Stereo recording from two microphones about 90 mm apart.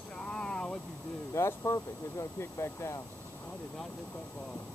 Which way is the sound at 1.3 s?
35° left (ahead or behind).